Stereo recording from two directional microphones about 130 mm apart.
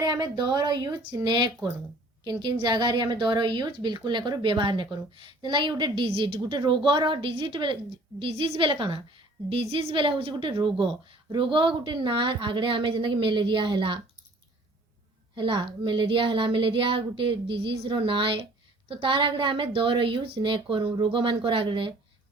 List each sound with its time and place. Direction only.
0.0 s a woman's voice: 30° right (ahead or behind)
15.4 s a woman's voice: 40° right (ahead or behind)